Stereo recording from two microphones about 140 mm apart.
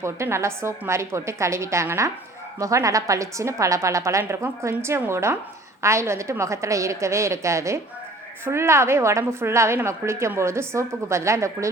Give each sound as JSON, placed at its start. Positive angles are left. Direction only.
{"t": 0.0, "sound": "a woman's voice", "side_deg": -20}